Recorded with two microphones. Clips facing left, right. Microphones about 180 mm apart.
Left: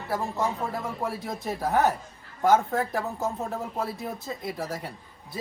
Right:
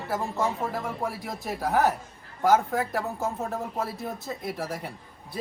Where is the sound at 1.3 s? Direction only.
Centre (ahead or behind).